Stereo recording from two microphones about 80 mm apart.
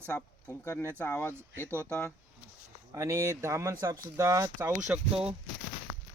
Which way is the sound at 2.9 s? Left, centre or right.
Right.